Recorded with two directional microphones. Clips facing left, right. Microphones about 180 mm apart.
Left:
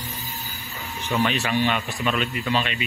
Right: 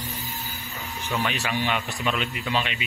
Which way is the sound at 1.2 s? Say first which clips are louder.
Left 5 dB; 10° right (ahead or behind).